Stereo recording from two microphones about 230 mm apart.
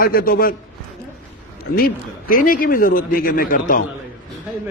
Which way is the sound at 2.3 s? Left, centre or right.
Left.